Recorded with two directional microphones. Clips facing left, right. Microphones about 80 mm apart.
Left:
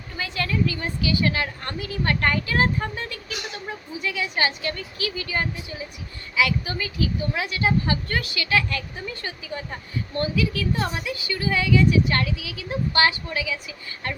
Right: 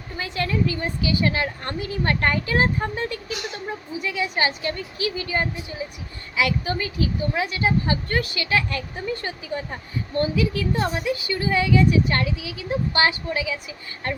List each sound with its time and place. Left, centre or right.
0.2 s a woman's voice: right
8.2 s a woman's voice: right